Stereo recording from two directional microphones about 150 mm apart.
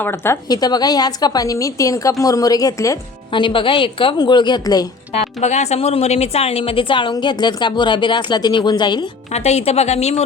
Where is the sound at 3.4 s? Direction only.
35° left (ahead or behind).